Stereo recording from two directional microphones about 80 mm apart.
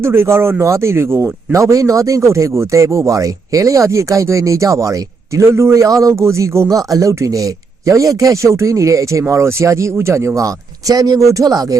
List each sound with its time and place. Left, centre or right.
0.0 s speech: right
1.5 s speech: right
6.7 s speech: right